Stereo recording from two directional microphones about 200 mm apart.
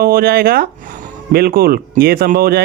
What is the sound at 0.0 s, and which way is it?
Speech, 45° right (ahead or behind).